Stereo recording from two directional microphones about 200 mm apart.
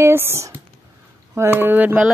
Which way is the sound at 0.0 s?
10° right (ahead or behind).